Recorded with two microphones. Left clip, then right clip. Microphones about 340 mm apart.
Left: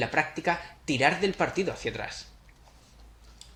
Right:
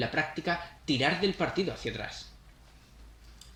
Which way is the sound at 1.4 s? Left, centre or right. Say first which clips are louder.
Left 3 dB; centre.